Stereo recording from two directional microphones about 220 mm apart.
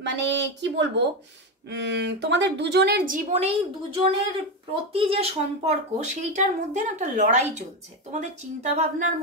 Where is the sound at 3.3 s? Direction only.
30° right (ahead or behind).